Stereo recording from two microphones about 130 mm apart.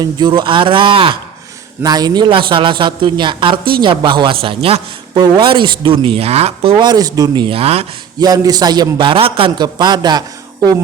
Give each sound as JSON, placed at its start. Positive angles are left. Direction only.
{"t": 0.0, "sound": "a man's voice", "side_deg": -35}
{"t": 1.8, "sound": "a man's voice", "side_deg": -30}
{"t": 8.2, "sound": "a man's voice", "side_deg": -30}